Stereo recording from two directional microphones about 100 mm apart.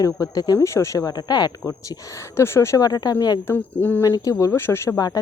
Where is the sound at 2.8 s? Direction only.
40° left (ahead or behind).